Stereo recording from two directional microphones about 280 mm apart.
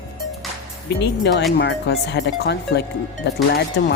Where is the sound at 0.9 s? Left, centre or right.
Left.